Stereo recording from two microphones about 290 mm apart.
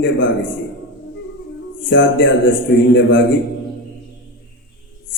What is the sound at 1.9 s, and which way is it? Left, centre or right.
A man's voice, left.